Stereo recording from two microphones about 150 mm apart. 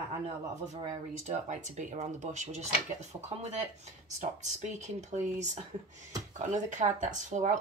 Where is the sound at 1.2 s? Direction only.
55° right (ahead or behind).